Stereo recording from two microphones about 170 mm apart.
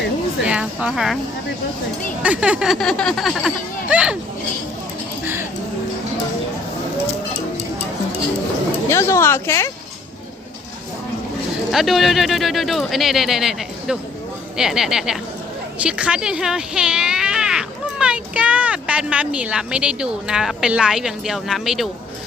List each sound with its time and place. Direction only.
0.4 s speech: 5° right (ahead or behind)
2.2 s speech: 5° right (ahead or behind)
5.2 s speech: 15° right (ahead or behind)
8.9 s speech: 15° left (ahead or behind)
11.7 s speech: centre (ahead or behind)